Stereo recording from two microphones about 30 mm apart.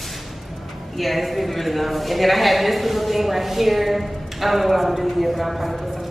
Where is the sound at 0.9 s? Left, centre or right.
Centre.